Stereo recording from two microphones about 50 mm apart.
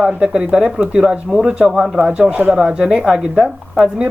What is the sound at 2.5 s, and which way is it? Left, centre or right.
Speech, centre.